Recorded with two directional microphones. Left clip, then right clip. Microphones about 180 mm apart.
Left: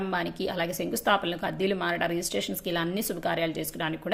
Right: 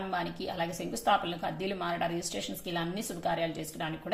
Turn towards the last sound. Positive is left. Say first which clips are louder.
# left 4 dB
turn(degrees=45)  # may be behind; listen again after turning